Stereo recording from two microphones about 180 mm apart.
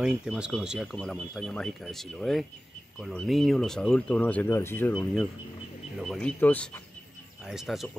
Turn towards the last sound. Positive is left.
turn(degrees=0)  # may be behind; listen again after turning